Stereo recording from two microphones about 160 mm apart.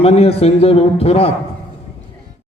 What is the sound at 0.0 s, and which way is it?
A man's voice, 40° left (ahead or behind).